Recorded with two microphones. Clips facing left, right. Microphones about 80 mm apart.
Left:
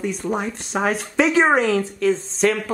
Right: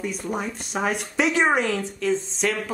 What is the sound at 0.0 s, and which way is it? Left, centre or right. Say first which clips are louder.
Speech: left 4 dB; left.